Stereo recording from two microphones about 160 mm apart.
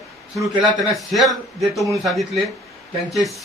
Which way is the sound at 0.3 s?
25° right (ahead or behind).